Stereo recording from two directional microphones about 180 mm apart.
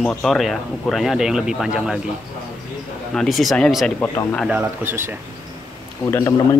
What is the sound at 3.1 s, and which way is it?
Speech, centre (ahead or behind).